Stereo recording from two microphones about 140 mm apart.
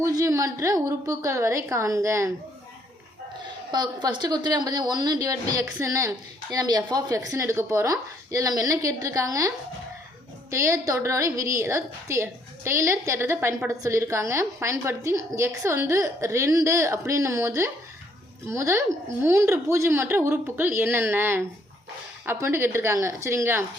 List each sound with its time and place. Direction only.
0.0 s a woman's voice: 25° right (ahead or behind)
3.7 s a woman's voice: 30° right (ahead or behind)
10.5 s a woman's voice: 20° right (ahead or behind)